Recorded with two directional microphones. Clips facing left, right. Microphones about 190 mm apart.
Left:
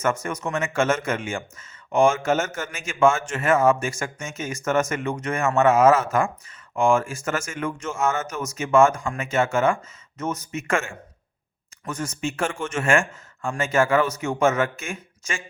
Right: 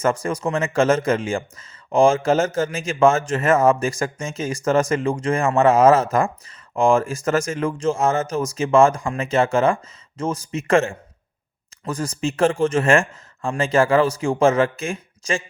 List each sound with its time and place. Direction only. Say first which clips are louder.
0.0 s speech: right 4 dB; 35° right (ahead or behind)